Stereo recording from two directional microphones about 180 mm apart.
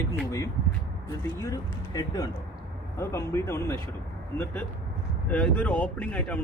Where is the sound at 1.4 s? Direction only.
20° left (ahead or behind).